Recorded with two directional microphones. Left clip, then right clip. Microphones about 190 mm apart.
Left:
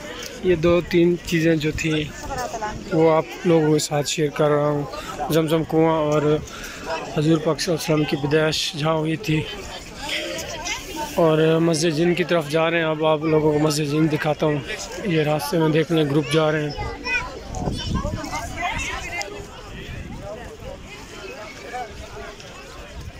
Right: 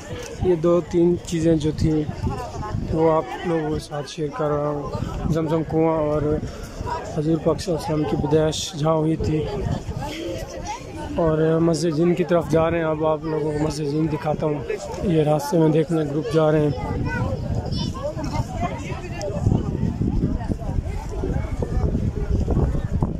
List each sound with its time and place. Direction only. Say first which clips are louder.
0.5 s speech: left 1 dB; 20° right (ahead or behind)
3.1 s speech: left 2 dB; centre (ahead or behind)
8.3 s speech: left 1 dB; 15° right (ahead or behind)
11.2 s speech: left 1 dB; 5° right (ahead or behind)
15.0 s speech: right 1 dB; 15° right (ahead or behind)